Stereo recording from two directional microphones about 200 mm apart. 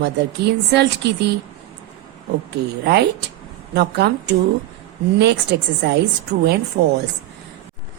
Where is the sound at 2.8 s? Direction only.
55° right (ahead or behind).